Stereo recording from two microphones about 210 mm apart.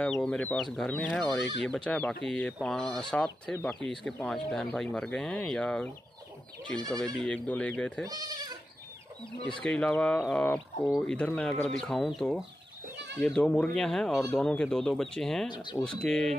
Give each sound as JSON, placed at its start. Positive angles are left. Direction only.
{"t": 0.0, "sound": "speech", "side_deg": 5}
{"t": 7.2, "sound": "speech", "side_deg": 5}
{"t": 8.1, "sound": "speech", "side_deg": -20}
{"t": 9.6, "sound": "speech", "side_deg": 5}
{"t": 15.5, "sound": "speech", "side_deg": 20}
{"t": 16.0, "sound": "speech", "side_deg": 5}